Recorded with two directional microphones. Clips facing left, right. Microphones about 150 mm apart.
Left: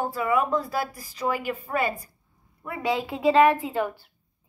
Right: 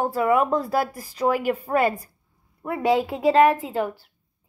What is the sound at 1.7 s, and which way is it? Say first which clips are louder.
A woman's voice: right 4 dB; 40° right (ahead or behind).